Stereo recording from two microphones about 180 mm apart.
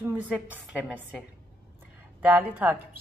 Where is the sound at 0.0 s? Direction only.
10° right (ahead or behind).